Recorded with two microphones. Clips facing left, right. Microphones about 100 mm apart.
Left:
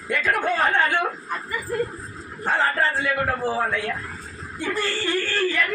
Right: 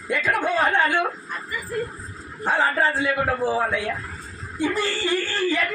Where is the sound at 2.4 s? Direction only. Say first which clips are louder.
Right 1 dB; 10° right (ahead or behind).